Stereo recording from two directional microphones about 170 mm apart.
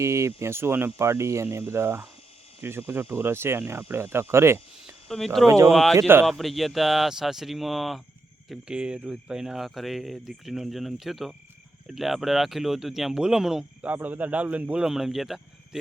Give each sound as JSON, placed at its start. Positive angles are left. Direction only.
{"t": 0.0, "sound": "speech", "side_deg": -15}
{"t": 5.0, "sound": "speech", "side_deg": 0}
{"t": 5.5, "sound": "speech", "side_deg": -15}
{"t": 5.7, "sound": "speech", "side_deg": 0}
{"t": 6.0, "sound": "speech", "side_deg": -15}
{"t": 6.2, "sound": "speech", "side_deg": 0}